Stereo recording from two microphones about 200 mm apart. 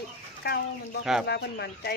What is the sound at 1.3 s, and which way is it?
Speech, 55° left (ahead or behind).